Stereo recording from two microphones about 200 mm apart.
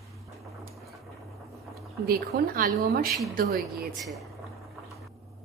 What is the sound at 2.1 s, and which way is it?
Speech, 45° right (ahead or behind).